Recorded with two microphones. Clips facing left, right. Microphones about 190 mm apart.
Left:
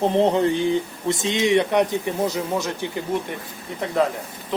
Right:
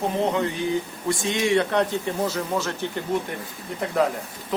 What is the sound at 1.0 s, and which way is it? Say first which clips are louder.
Speech: left 2 dB; 20° left (ahead or behind).